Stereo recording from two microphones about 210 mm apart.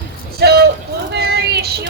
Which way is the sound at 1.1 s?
50° right (ahead or behind).